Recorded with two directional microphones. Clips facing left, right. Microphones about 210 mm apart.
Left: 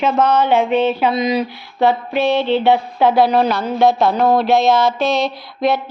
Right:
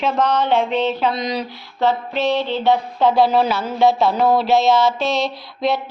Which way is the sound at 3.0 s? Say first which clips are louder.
Left 1 dB; 5° left (ahead or behind).